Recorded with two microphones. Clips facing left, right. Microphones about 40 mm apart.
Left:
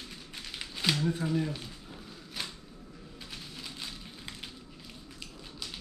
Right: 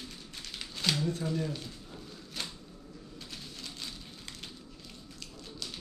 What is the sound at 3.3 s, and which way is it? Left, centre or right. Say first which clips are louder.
Rain on surface: left 2 dB; centre.